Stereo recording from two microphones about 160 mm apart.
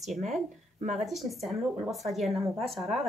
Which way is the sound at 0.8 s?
45° right (ahead or behind).